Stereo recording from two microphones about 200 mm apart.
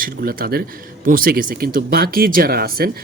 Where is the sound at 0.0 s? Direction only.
45° right (ahead or behind).